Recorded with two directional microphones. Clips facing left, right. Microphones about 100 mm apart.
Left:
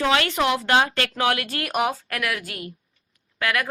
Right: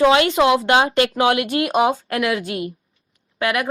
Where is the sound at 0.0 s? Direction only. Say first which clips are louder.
Right 7 dB; 20° right (ahead or behind).